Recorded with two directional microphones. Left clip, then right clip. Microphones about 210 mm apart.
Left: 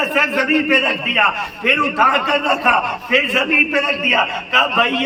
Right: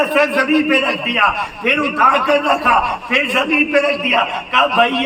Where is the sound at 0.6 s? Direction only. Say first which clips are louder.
Even; 5° left (ahead or behind).